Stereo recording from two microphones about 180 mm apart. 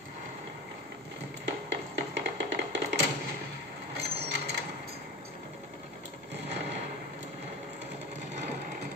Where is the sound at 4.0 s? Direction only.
65° right (ahead or behind).